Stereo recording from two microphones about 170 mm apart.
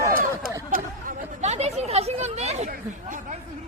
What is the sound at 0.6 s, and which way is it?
Chatter, 50° right (ahead or behind).